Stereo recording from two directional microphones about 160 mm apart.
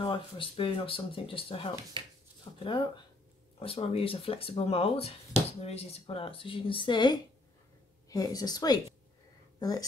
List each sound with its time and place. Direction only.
0.0 s speech: 35° left (ahead or behind)
2.5 s a sound: 30° left (ahead or behind)
3.5 s a woman's voice: 35° left (ahead or behind)